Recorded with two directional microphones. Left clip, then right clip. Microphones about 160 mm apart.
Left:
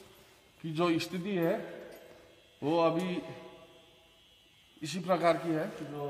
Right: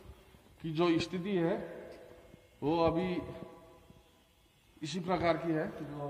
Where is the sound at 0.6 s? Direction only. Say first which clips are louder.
Even; 45° left (ahead or behind).